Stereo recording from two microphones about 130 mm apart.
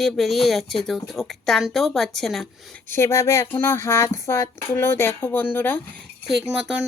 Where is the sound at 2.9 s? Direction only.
20° left (ahead or behind).